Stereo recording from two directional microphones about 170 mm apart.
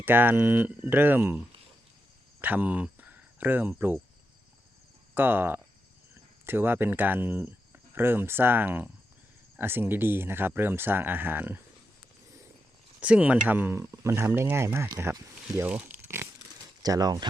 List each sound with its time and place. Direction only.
0.0 s speech: 10° right (ahead or behind)
2.4 s speech: 10° right (ahead or behind)
5.1 s speech: 10° right (ahead or behind)
13.0 s speech: 5° right (ahead or behind); by 17.2 s 25° right (ahead or behind)